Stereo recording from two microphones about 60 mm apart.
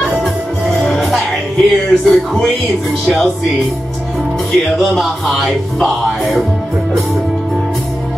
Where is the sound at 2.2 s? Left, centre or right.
Centre.